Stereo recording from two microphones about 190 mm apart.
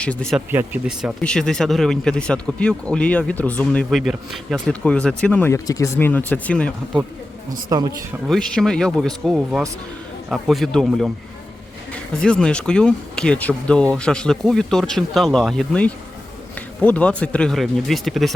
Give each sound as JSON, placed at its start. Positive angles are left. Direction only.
{"t": 0.0, "sound": "speech", "side_deg": 5}
{"t": 0.5, "sound": "speech", "side_deg": -10}
{"t": 1.2, "sound": "speech", "side_deg": 5}
{"t": 7.7, "sound": "speech", "side_deg": -20}
{"t": 8.3, "sound": "speech", "side_deg": 5}